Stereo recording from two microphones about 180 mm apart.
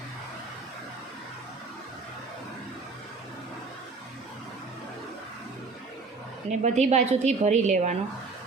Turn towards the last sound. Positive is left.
turn(degrees=-40)  # may be behind; listen again after turning